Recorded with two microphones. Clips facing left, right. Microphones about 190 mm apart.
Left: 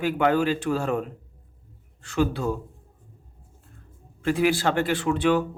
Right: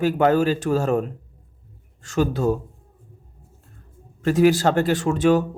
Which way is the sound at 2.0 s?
40° right (ahead or behind).